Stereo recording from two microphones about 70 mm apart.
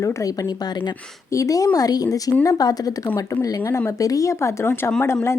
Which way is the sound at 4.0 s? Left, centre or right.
Left.